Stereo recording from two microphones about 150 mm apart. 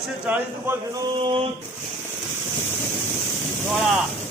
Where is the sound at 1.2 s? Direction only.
35° right (ahead or behind).